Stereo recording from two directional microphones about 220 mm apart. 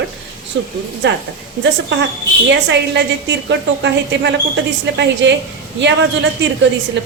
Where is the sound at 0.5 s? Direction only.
55° right (ahead or behind).